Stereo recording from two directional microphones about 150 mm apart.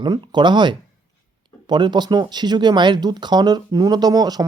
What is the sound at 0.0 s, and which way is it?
Speech, 30° right (ahead or behind).